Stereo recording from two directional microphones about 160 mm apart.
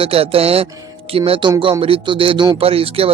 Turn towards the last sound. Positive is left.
turn(degrees=-35)  # may be behind; listen again after turning